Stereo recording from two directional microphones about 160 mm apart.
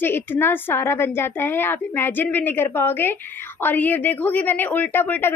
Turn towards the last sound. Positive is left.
turn(degrees=10)  # may be behind; listen again after turning